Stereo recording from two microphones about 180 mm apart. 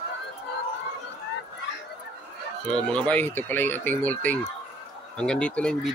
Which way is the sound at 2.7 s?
5° left (ahead or behind).